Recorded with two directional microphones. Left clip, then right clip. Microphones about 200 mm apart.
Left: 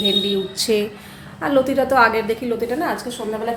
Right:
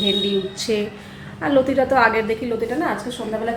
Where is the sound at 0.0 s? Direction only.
20° left (ahead or behind).